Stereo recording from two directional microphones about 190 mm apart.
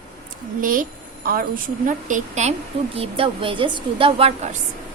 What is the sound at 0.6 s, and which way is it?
A woman's voice, 45° right (ahead or behind).